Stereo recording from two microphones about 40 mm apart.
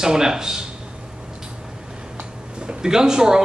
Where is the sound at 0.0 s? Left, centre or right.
Centre.